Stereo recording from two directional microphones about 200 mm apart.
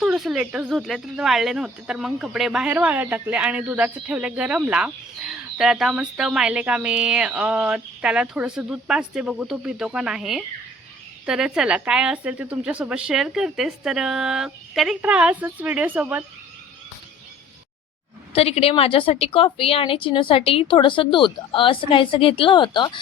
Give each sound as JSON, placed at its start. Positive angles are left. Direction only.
{"t": 0.0, "sound": "speech", "side_deg": -5}
{"t": 18.3, "sound": "a woman's voice", "side_deg": 30}